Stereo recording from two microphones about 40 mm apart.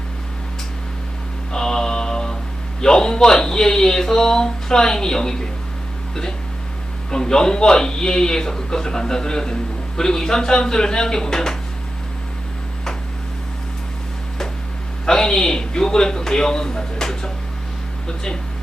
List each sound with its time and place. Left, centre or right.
1.5 s mantra: centre
2.8 s speech: centre
7.1 s speech: centre
15.0 s speech: centre